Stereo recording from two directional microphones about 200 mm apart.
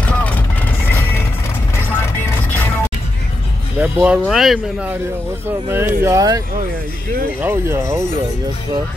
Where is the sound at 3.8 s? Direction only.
5° right (ahead or behind).